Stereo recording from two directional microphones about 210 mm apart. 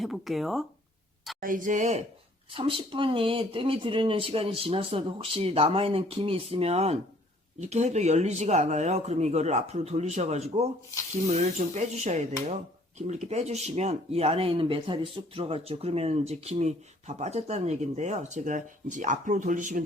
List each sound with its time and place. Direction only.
0.0 s speech: centre (ahead or behind)
1.4 s speech: 40° right (ahead or behind)